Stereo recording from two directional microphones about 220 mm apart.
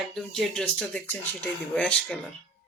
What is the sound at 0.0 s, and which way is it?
Speech, centre (ahead or behind).